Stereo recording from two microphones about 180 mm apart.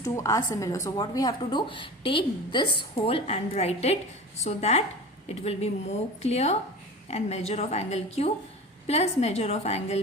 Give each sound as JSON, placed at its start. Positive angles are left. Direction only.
{"t": 0.0, "sound": "a woman's voice", "side_deg": 15}